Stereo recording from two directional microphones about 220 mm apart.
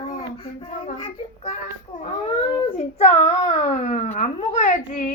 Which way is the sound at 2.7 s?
30° left (ahead or behind).